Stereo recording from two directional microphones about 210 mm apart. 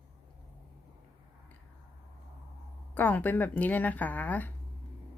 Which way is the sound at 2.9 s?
10° left (ahead or behind).